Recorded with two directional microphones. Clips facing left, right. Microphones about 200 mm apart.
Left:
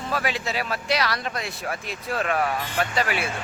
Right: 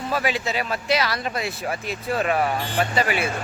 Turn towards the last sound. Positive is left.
turn(degrees=0)  # may be behind; listen again after turning